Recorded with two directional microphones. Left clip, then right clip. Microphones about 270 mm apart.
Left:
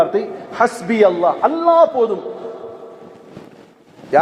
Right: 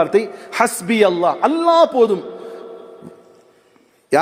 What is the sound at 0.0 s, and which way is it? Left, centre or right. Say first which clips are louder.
A man's voice: even; right.